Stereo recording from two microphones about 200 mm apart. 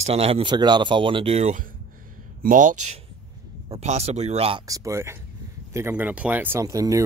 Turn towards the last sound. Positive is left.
turn(degrees=-15)  # may be behind; listen again after turning